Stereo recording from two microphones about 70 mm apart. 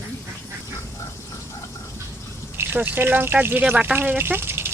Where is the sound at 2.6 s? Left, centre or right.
Right.